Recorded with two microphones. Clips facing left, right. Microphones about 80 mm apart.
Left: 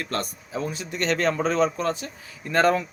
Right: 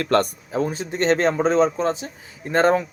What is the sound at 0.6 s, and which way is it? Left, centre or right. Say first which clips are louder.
Speech: right 6 dB; right.